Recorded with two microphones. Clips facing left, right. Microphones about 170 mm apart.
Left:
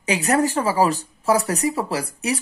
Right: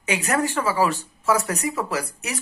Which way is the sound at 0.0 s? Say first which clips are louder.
Left 4 dB; 35° left (ahead or behind).